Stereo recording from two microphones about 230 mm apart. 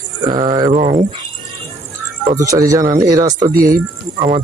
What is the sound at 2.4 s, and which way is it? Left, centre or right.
Speech, centre.